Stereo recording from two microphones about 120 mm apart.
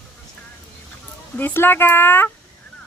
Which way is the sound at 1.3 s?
20° left (ahead or behind).